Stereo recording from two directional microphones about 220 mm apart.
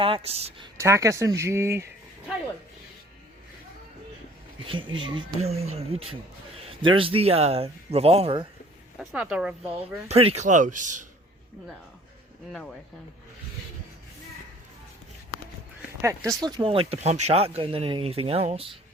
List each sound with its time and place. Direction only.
0.0 s speech: 25° right (ahead or behind)
0.8 s speech: 15° right (ahead or behind)
4.6 s speech: 25° right (ahead or behind)
9.0 s speech: 5° right (ahead or behind)
9.6 s speech: 25° right (ahead or behind)
12.5 s speech: 5° left (ahead or behind)
16.0 s speech: 15° right (ahead or behind)